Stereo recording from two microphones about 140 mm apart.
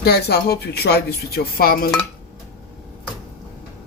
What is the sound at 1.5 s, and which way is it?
Speech, 90° left.